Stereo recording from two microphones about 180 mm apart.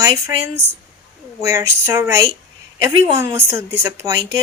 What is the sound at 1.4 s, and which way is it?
A woman's voice, 15° right (ahead or behind).